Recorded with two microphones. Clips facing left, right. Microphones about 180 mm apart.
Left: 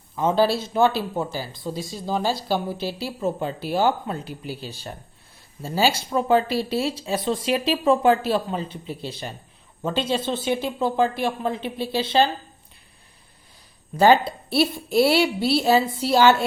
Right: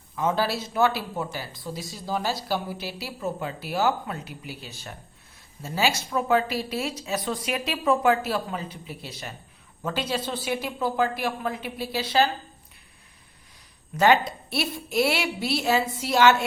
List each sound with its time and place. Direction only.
0.2 s speech: 30° left (ahead or behind)
13.9 s a woman's voice: 30° left (ahead or behind)